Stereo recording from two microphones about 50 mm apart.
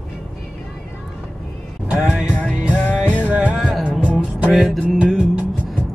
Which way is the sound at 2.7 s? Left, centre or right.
Left.